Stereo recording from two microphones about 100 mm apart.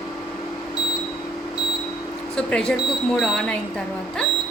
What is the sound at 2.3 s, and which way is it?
A woman's voice, 5° left (ahead or behind).